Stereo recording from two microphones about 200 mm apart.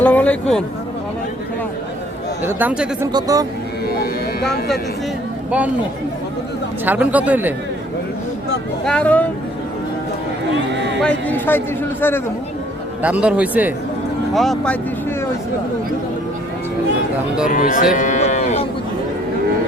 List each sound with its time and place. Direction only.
0.0 s speech: 5° left (ahead or behind)
2.4 s a man's voice: 10° right (ahead or behind)
3.1 s speech: 20° right (ahead or behind)
3.8 s music: 50° left (ahead or behind)
5.5 s speech: 5° right (ahead or behind)
6.8 s a man's voice: 10° right (ahead or behind)
8.8 s speech: 5° left (ahead or behind)
10.5 s a sound: 65° right (ahead or behind)
11.0 s speech: 5° left (ahead or behind)
13.0 s a man's voice: 5° right (ahead or behind)
17.5 s speech: 45° left (ahead or behind)
17.9 s livestock: 40° left (ahead or behind)